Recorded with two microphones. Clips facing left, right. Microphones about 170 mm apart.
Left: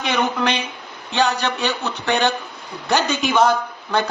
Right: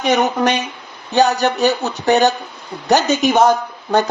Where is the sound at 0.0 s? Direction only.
45° right (ahead or behind).